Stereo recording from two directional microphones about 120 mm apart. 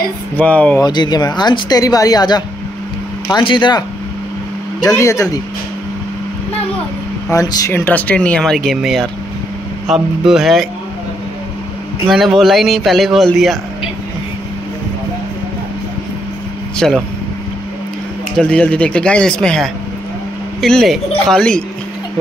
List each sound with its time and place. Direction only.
0.4 s speech: 10° left (ahead or behind)
0.7 s speech: 35° left (ahead or behind)
4.9 s speech: 25° left (ahead or behind)
7.2 s speech: 30° left (ahead or behind)
7.8 s speech: 15° left (ahead or behind)
10.2 s speech: centre (ahead or behind)
12.1 s speech: centre (ahead or behind)
16.7 s speech: 5° left (ahead or behind)
18.4 s speech: 10° left (ahead or behind)